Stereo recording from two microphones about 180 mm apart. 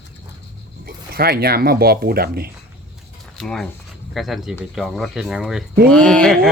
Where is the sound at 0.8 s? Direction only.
55° right (ahead or behind).